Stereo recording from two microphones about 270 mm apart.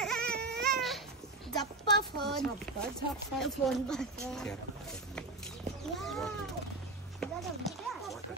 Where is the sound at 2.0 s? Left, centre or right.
Right.